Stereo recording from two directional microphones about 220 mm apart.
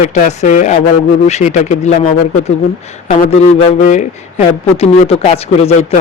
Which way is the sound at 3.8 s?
35° left (ahead or behind).